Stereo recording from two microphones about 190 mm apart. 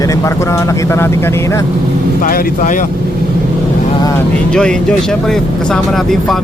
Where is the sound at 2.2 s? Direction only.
50° left (ahead or behind).